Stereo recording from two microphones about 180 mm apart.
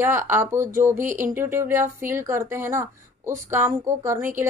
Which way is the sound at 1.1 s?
45° right (ahead or behind).